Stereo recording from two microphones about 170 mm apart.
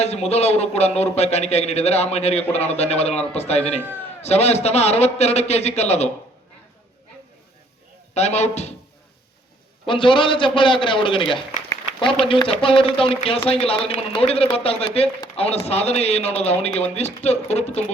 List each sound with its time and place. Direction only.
0.0 s a man's voice: 40° left (ahead or behind)
8.1 s a man's voice: 40° left (ahead or behind)
9.8 s a man's voice: 30° left (ahead or behind)